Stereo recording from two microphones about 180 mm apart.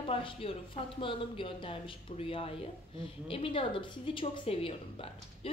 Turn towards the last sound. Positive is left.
turn(degrees=30)  # may be behind; listen again after turning